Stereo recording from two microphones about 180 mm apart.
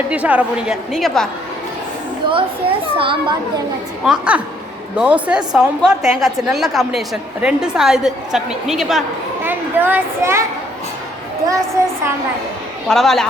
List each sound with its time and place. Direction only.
0.1 s a woman's voice: 10° right (ahead or behind)
2.3 s a child's voice: 30° right (ahead or behind)
4.0 s a woman's voice: 5° right (ahead or behind)
12.9 s a woman's voice: centre (ahead or behind)